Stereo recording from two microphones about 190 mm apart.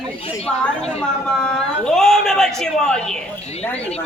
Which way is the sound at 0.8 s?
5° left (ahead or behind).